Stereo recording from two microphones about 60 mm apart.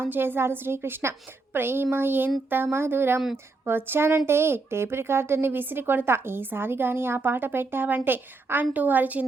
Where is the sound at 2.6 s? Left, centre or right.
Right.